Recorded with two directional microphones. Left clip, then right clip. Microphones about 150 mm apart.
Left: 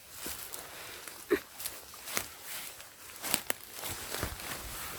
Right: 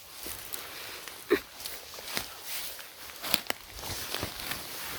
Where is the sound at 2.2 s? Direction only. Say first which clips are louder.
Right 1 dB; 5° left (ahead or behind).